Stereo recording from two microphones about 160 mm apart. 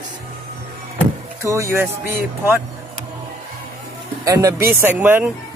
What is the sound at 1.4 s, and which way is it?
Speech, 20° right (ahead or behind).